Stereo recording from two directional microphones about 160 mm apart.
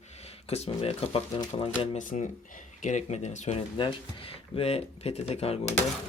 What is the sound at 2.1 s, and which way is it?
Speech, 50° left (ahead or behind).